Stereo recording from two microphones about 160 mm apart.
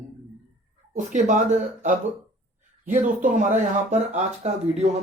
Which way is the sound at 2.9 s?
50° right (ahead or behind).